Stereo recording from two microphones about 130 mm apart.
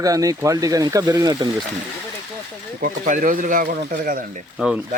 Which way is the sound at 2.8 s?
85° right.